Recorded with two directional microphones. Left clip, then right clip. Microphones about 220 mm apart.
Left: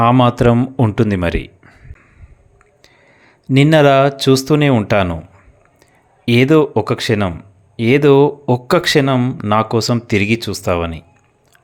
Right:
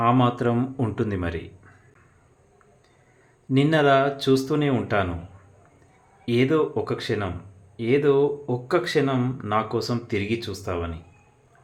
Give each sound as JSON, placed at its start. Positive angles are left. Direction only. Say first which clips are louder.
{"t": 0.0, "sound": "speech", "louder": "left 9 dB", "side_deg": 45}
{"t": 3.5, "sound": "speech", "louder": "left 9 dB", "side_deg": 45}
{"t": 6.2, "sound": "speech", "louder": "left 10 dB", "side_deg": 45}